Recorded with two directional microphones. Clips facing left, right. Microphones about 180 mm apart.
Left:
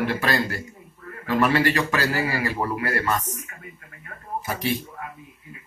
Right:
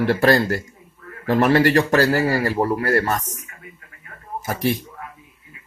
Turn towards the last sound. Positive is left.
turn(degrees=-45)  # may be behind; listen again after turning